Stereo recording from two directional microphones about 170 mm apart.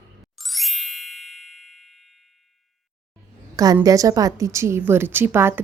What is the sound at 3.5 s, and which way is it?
A woman's voice, 20° right (ahead or behind).